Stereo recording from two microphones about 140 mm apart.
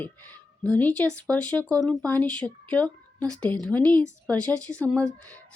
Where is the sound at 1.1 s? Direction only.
10° left (ahead or behind).